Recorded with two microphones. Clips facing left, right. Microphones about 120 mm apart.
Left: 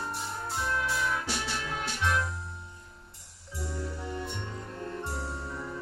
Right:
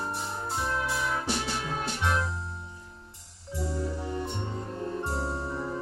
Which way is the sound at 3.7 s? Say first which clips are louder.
Right 3 dB; 30° right (ahead or behind).